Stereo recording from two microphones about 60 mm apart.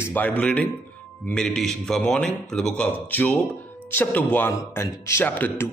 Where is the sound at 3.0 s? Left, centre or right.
Left.